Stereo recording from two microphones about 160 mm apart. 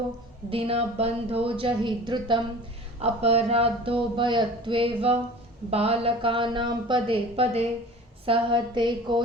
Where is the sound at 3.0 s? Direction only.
40° right (ahead or behind).